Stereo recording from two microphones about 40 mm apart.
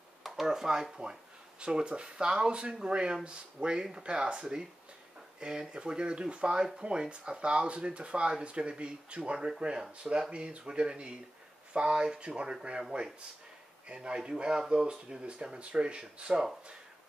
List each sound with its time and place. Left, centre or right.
0.2 s speech: centre; by 12.5 s right
13.8 s speech: right